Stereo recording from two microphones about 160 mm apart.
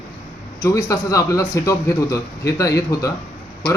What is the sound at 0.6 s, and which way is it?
A man's voice, 20° left (ahead or behind).